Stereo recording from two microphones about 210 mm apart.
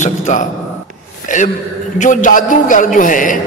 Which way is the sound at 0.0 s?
35° left (ahead or behind).